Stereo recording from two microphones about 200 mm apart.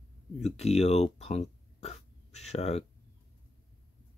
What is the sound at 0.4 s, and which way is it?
Speech, 35° left (ahead or behind).